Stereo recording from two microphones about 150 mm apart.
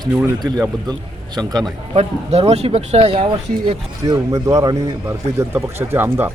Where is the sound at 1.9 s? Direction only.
45° right (ahead or behind).